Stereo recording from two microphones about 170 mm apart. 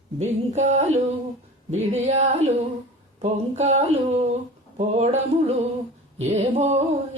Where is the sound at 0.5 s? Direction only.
40° right (ahead or behind).